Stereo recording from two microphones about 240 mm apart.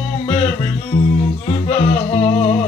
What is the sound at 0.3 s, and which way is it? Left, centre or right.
Music, left.